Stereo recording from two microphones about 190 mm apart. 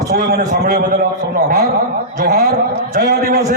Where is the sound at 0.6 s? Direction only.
55° right (ahead or behind).